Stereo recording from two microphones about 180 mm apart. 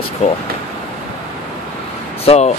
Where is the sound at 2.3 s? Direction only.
35° left (ahead or behind).